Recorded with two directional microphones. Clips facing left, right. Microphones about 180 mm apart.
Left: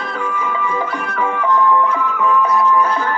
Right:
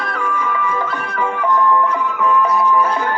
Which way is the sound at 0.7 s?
15° left (ahead or behind).